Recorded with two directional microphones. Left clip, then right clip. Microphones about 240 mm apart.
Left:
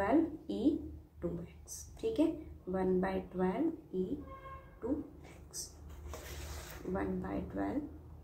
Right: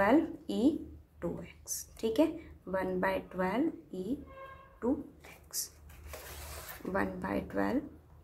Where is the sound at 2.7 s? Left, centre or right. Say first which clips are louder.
Right 2 dB; right.